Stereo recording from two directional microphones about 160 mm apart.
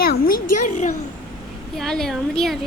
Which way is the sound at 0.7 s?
50° left (ahead or behind).